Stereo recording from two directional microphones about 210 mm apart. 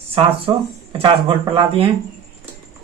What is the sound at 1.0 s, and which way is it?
Speech, 25° right (ahead or behind).